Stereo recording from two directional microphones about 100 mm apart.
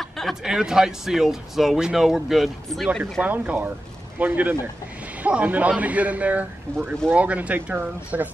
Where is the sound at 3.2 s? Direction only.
15° right (ahead or behind).